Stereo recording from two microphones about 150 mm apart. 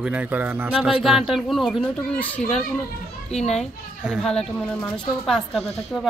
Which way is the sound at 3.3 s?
45° left (ahead or behind).